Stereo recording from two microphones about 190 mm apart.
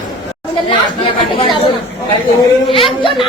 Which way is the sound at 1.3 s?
25° left (ahead or behind).